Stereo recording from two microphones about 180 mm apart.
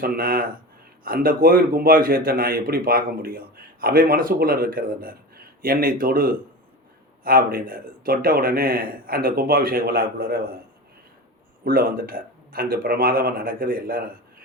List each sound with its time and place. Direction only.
0.0 s a man's voice: 55° right (ahead or behind)
11.6 s a man's voice: 55° right (ahead or behind)